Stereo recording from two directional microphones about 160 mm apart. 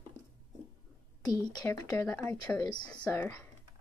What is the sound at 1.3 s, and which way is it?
Speech, 25° left (ahead or behind).